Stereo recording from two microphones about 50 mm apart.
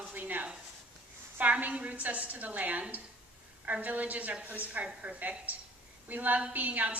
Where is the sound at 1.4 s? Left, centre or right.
Right.